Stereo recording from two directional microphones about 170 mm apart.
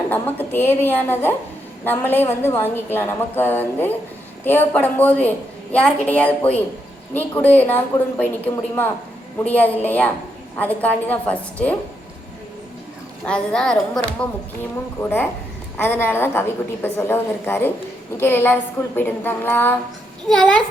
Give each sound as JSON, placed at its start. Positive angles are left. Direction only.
{"t": 0.1, "sound": "a woman's voice", "side_deg": 10}
{"t": 13.2, "sound": "a woman's voice", "side_deg": 5}
{"t": 15.8, "sound": "a woman's voice", "side_deg": 10}